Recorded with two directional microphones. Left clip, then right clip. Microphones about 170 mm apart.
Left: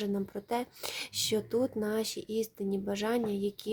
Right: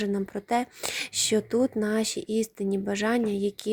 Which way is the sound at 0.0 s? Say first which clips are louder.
Right 5 dB; 30° right (ahead or behind).